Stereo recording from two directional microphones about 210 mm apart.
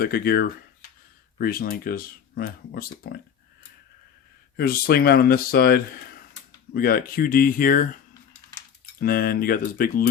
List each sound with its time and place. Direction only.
0.0 s speech: 45° left (ahead or behind)
4.5 s speech: 45° left (ahead or behind)
9.0 s speech: 45° left (ahead or behind)